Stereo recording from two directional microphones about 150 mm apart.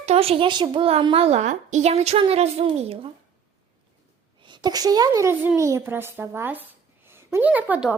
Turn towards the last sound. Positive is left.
turn(degrees=-10)  # may be behind; listen again after turning